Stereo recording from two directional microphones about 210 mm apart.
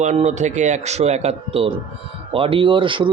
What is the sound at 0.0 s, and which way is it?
A man's voice, 35° right (ahead or behind).